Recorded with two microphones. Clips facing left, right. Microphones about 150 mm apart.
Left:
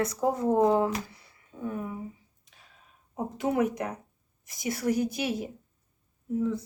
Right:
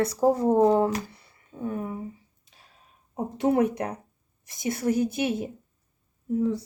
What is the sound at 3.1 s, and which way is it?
Speech, 30° right (ahead or behind).